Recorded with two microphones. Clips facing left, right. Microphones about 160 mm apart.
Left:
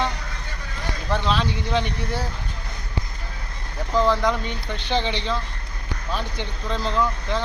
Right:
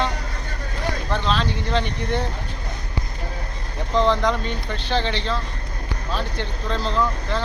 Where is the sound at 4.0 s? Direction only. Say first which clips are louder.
Right 1 dB; 10° left (ahead or behind).